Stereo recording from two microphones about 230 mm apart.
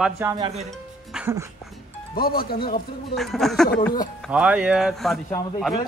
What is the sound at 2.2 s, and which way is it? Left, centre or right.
Speech, left.